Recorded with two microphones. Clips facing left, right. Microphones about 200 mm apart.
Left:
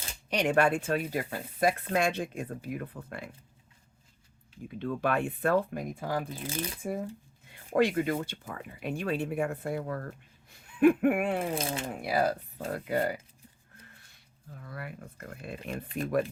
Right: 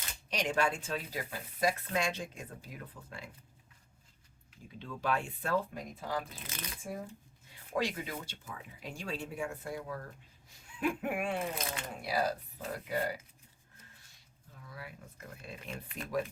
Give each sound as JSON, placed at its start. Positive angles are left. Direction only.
{"t": 0.3, "sound": "speech", "side_deg": 60}
{"t": 4.8, "sound": "speech", "side_deg": 60}
{"t": 6.2, "sound": "speech", "side_deg": 30}
{"t": 7.7, "sound": "speech", "side_deg": 55}
{"t": 11.5, "sound": "speech", "side_deg": 30}
{"t": 12.0, "sound": "speech", "side_deg": 55}
{"t": 14.6, "sound": "speech", "side_deg": 60}